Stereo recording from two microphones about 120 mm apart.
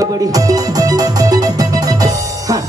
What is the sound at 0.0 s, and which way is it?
Music, 30° right (ahead or behind).